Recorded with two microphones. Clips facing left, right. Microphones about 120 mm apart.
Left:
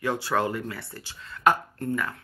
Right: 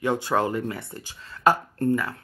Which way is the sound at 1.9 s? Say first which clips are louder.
Right 2 dB; 30° right (ahead or behind).